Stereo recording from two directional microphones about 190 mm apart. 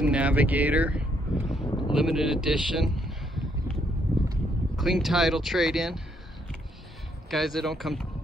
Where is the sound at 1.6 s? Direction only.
25° left (ahead or behind).